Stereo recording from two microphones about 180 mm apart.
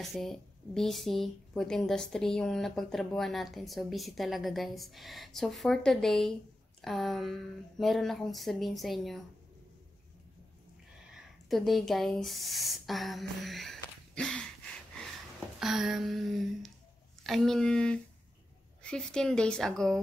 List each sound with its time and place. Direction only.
0.0 s a woman's voice: centre (ahead or behind)
11.1 s speech: centre (ahead or behind)
13.4 s a sound: centre (ahead or behind)
15.6 s a woman's voice: centre (ahead or behind)